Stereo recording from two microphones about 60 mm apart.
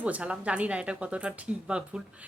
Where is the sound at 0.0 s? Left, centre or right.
Right.